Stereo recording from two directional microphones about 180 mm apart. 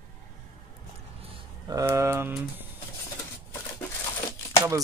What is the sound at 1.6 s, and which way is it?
Speech, 15° right (ahead or behind).